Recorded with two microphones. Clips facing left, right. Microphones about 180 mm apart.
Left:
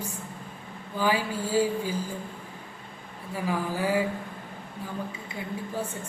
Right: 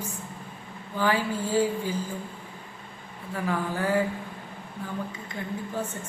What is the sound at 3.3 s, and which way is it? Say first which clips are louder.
Speech: even; 10° left (ahead or behind).